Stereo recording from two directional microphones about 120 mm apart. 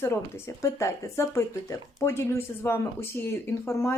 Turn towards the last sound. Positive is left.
turn(degrees=20)  # may be behind; listen again after turning